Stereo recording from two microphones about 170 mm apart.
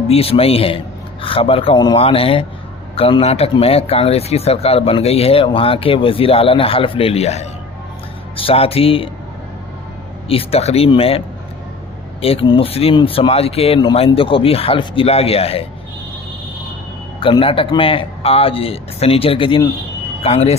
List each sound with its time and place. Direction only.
0.1 s speech: 35° left (ahead or behind)
10.2 s speech: 35° left (ahead or behind)
17.2 s speech: 30° left (ahead or behind)